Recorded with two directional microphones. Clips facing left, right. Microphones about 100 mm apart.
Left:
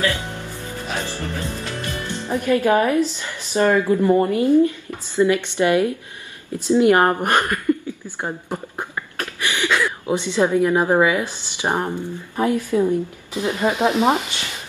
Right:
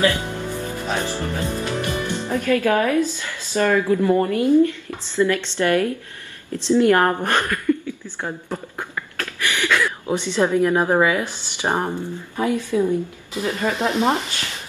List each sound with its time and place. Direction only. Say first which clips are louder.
0.0 s music: right 3 dB; 15° right (ahead or behind)
0.9 s speech: right 2 dB; 15° right (ahead or behind)
2.2 s a woman's voice: left 2 dB; 15° left (ahead or behind)
11.7 s speech: even; 15° right (ahead or behind)
12.5 s speech: even; 15° left (ahead or behind)